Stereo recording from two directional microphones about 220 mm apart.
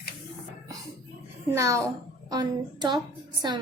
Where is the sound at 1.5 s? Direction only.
15° right (ahead or behind).